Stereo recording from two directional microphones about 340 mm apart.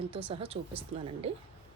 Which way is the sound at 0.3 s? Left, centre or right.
Centre.